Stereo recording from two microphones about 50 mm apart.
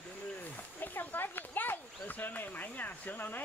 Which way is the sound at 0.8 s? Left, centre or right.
Left.